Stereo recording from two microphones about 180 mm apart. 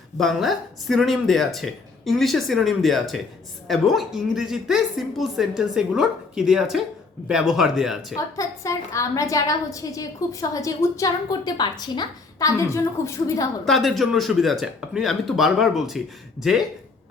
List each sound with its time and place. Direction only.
0.2 s speech: centre (ahead or behind)
8.1 s a woman's voice: 15° left (ahead or behind)
13.7 s speech: centre (ahead or behind)